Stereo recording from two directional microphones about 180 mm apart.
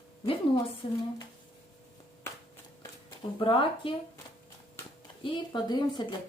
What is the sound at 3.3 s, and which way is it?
Speech, 25° left (ahead or behind).